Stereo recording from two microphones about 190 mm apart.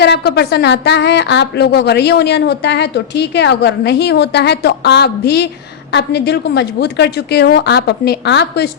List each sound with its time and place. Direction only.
0.0 s a woman's voice: 60° left (ahead or behind)